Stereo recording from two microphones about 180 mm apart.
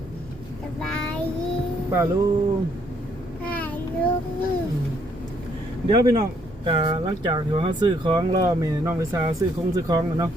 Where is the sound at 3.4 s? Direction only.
10° left (ahead or behind).